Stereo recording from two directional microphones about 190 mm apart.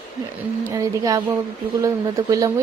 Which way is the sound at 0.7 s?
15° right (ahead or behind).